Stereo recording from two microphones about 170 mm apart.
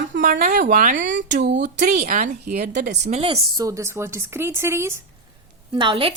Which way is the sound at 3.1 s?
35° right (ahead or behind).